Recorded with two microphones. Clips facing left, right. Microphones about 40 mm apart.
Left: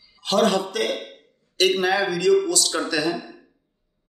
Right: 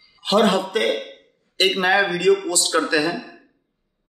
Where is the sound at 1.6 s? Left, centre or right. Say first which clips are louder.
Right 2 dB; right.